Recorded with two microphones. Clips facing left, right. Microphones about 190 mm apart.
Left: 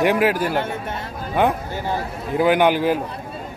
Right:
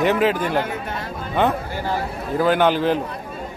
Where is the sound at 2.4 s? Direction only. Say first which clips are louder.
Left 1 dB; 15° left (ahead or behind).